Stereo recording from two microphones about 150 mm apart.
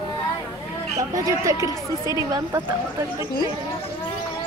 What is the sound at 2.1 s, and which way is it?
Speech, 25° right (ahead or behind).